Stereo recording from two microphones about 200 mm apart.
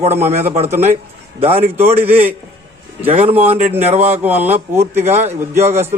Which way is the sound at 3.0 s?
30° right (ahead or behind).